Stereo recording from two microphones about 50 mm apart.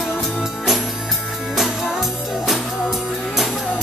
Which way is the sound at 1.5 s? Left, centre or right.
Centre.